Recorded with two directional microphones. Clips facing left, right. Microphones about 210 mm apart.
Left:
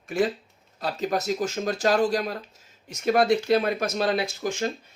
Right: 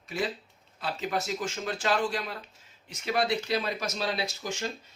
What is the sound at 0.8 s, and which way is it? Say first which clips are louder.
Speech: left 5 dB; 40° left (ahead or behind).